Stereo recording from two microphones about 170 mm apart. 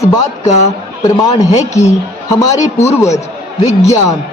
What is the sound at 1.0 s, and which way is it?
Speech, 20° left (ahead or behind).